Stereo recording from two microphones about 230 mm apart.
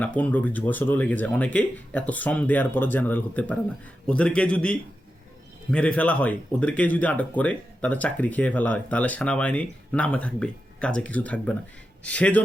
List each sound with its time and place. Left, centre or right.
0.0 s a man's voice: centre